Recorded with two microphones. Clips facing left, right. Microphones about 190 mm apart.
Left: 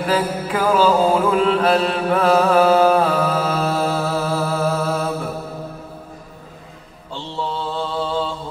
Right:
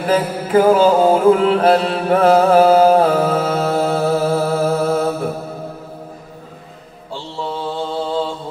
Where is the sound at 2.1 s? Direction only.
35° right (ahead or behind).